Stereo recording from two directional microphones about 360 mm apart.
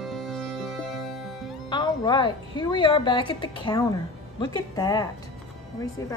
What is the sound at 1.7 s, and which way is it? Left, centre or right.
A woman's voice, centre.